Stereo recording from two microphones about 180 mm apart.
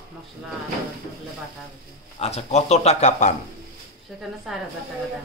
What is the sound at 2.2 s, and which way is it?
Speech, 35° left (ahead or behind).